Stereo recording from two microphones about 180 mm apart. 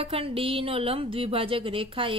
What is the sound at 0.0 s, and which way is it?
A woman's voice, 30° right (ahead or behind).